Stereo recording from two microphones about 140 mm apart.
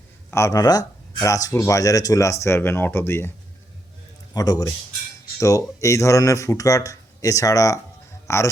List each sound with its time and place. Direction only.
0.3 s speech: 20° left (ahead or behind)
4.4 s speech: 25° left (ahead or behind)